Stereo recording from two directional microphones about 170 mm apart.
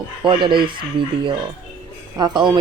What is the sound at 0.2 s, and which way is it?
Speech, 30° right (ahead or behind).